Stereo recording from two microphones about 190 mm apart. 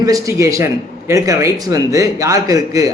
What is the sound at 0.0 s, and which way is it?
Speech, 15° right (ahead or behind).